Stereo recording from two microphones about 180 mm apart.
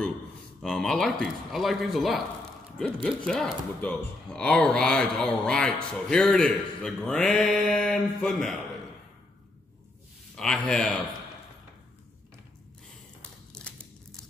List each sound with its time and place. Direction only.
0.6 s speech: centre (ahead or behind)
3.3 s speech: centre (ahead or behind)
10.3 s speech: 5° left (ahead or behind)